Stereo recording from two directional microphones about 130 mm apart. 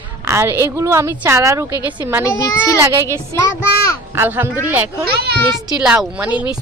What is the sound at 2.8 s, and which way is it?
A woman's voice, 20° right (ahead or behind).